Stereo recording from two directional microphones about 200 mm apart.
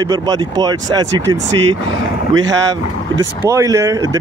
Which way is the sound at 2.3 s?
70° right (ahead or behind).